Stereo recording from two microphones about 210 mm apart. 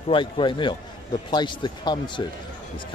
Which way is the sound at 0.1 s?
25° left (ahead or behind).